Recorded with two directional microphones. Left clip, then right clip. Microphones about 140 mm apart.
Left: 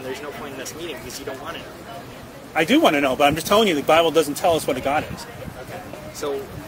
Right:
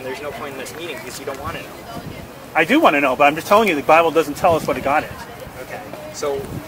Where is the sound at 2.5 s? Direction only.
35° left (ahead or behind).